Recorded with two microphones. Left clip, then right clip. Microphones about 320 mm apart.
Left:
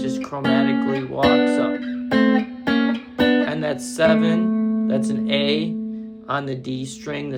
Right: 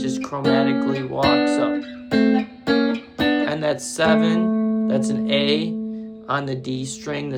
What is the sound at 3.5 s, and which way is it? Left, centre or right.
Speech, centre.